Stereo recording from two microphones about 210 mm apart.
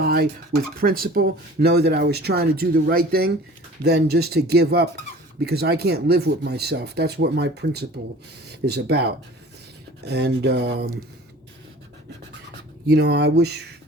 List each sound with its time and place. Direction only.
0.0 s speech: 45° right (ahead or behind)
12.9 s speech: 50° right (ahead or behind)